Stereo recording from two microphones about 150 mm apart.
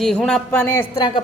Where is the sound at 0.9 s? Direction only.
30° left (ahead or behind).